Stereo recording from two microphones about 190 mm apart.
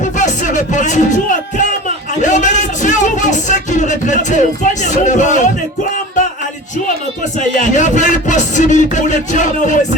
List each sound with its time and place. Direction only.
0.0 s music: 40° left (ahead or behind)
2.2 s speech: 40° left (ahead or behind)
7.3 s speech: 40° left (ahead or behind)